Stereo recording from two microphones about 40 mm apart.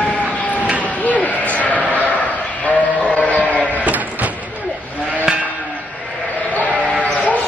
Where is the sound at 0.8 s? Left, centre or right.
Left.